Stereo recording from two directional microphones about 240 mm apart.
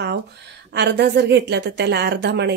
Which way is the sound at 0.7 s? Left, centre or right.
Right.